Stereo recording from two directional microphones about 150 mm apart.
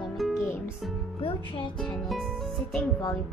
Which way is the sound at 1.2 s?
35° left (ahead or behind).